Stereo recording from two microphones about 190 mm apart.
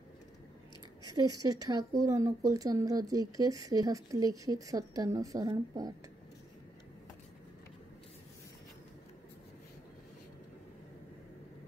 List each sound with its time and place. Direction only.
1.0 s speech: 20° right (ahead or behind)